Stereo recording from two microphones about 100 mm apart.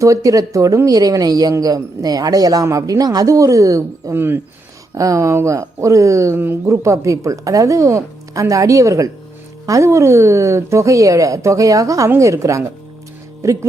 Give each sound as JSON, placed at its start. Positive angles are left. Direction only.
{"t": 0.0, "sound": "speech", "side_deg": -35}